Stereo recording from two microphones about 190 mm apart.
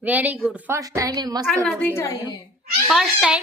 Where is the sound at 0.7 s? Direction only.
15° right (ahead or behind).